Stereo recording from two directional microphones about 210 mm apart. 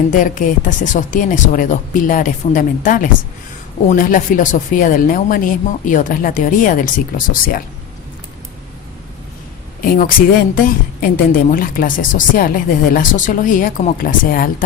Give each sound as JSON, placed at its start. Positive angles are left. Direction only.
{"t": 0.1, "sound": "a woman's voice", "side_deg": 40}
{"t": 9.8, "sound": "a woman's voice", "side_deg": 45}